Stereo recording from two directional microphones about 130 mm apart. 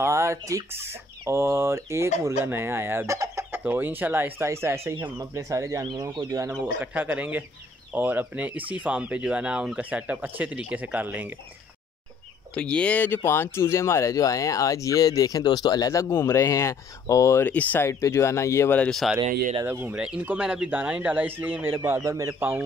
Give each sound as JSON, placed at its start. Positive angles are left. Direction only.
{"t": 0.0, "sound": "speech", "side_deg": -20}
{"t": 6.6, "sound": "speech", "side_deg": -10}
{"t": 12.5, "sound": "speech", "side_deg": 10}
{"t": 18.8, "sound": "speech", "side_deg": 5}
{"t": 19.6, "sound": "speech", "side_deg": -15}